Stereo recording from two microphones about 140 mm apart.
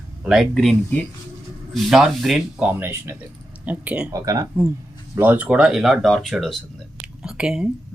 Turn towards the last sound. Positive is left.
turn(degrees=-5)  # may be behind; listen again after turning